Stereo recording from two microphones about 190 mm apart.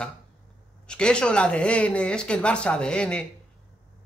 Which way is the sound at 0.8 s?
5° left (ahead or behind).